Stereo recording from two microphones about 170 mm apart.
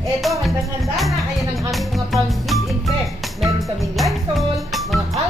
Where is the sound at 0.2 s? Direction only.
Centre (ahead or behind).